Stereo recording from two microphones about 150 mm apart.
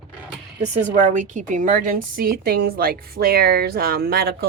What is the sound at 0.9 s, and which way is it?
A woman's voice, 60° right (ahead or behind).